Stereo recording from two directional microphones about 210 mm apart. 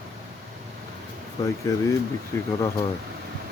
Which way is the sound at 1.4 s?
15° left (ahead or behind).